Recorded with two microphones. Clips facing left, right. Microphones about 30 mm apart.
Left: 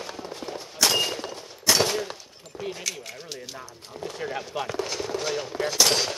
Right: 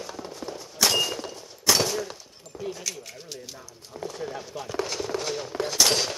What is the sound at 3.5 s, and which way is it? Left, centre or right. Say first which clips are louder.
Speech: left 3 dB; left.